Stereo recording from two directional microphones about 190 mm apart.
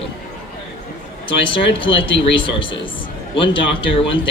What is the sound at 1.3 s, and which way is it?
Speech, 25° left (ahead or behind).